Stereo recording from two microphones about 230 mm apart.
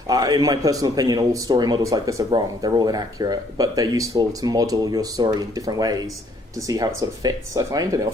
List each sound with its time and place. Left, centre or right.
0.1 s a man's voice: centre